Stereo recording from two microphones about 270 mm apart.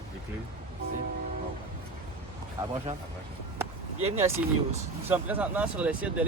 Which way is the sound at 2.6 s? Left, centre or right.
Centre.